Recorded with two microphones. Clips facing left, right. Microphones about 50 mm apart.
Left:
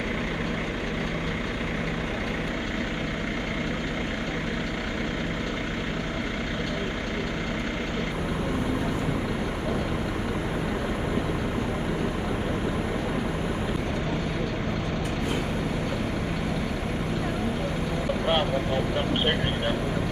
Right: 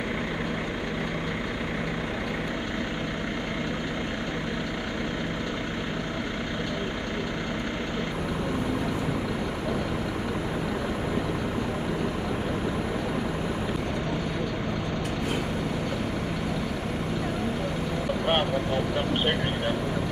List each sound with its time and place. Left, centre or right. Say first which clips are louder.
18.2 s vehicle: even; right